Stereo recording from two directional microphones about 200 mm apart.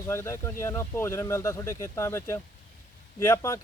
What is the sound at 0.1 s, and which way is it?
A man's voice, 15° left (ahead or behind).